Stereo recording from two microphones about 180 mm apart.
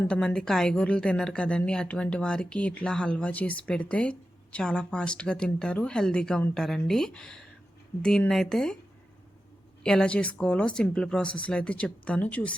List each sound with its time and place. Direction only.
0.1 s a woman's voice: 5° left (ahead or behind)
9.8 s a woman's voice: 5° left (ahead or behind)